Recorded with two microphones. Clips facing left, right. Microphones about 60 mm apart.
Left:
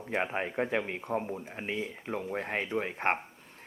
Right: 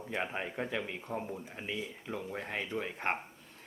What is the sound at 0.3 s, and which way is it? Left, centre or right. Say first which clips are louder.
Speech: left 5 dB; left.